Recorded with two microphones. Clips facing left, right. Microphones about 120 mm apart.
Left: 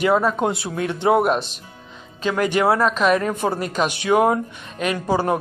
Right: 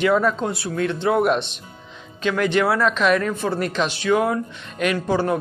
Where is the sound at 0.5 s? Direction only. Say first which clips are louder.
Right 1 dB; 20° left (ahead or behind).